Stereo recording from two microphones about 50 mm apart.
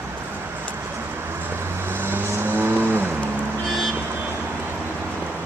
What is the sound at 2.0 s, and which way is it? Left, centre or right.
Vehicle, right.